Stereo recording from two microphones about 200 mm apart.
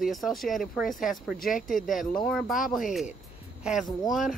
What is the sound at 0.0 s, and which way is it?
Speech, centre (ahead or behind).